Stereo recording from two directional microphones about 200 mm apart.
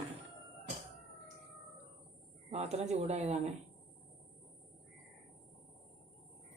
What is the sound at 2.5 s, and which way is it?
Speech, 35° right (ahead or behind).